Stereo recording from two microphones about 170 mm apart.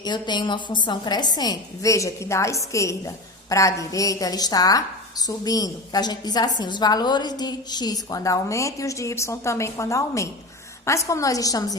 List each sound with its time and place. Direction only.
0.0 s a woman's voice: 25° left (ahead or behind)